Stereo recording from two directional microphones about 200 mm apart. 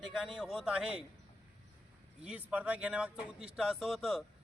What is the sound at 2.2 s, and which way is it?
Speech, 5° right (ahead or behind).